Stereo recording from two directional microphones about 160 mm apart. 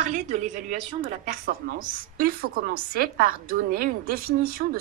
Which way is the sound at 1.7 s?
70° right (ahead or behind).